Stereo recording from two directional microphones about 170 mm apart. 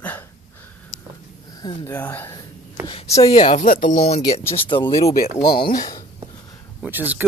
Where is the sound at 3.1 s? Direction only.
35° left (ahead or behind).